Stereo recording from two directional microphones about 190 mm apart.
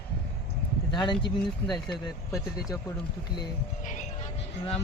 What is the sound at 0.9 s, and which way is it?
Speech, 25° left (ahead or behind).